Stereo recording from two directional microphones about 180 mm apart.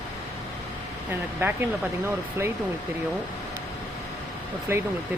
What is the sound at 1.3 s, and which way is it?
Speech, 10° right (ahead or behind).